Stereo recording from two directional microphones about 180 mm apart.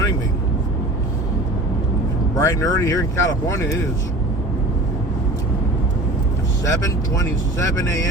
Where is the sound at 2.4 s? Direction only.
20° left (ahead or behind).